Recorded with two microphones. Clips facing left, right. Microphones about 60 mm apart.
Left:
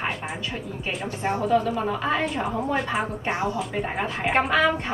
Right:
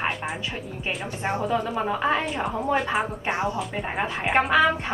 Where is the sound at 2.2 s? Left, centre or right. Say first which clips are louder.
Even; centre.